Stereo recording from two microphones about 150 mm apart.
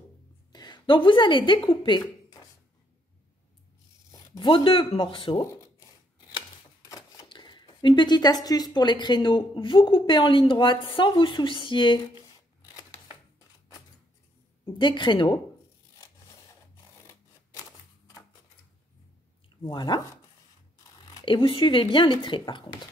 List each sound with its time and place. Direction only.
0.5 s speech: 30° left (ahead or behind)
4.1 s speech: 30° left (ahead or behind)
7.2 s speech: 30° left (ahead or behind)
12.7 s scissors: 25° left (ahead or behind)
14.8 s speech: 30° left (ahead or behind)
17.6 s a sound: 25° left (ahead or behind)
19.6 s speech: 30° left (ahead or behind)
21.0 s speech: 25° left (ahead or behind)